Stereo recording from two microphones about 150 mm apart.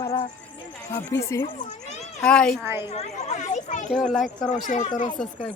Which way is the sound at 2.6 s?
15° right (ahead or behind).